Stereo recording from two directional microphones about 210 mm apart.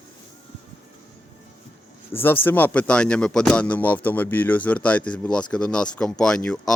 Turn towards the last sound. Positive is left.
turn(degrees=5)  # may be behind; listen again after turning